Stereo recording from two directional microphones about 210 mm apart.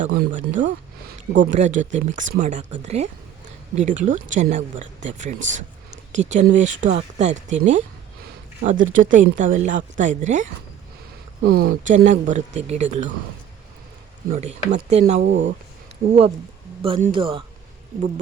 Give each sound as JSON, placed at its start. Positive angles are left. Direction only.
{"t": 0.2, "sound": "speech", "side_deg": -35}
{"t": 11.5, "sound": "speech", "side_deg": -45}
{"t": 11.9, "sound": "speech", "side_deg": -35}
{"t": 14.3, "sound": "speech", "side_deg": -30}
{"t": 15.3, "sound": "speech", "side_deg": -60}
{"t": 16.0, "sound": "speech", "side_deg": -30}